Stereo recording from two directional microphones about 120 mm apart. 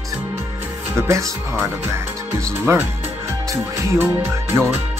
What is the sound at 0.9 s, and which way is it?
Speech, 25° right (ahead or behind).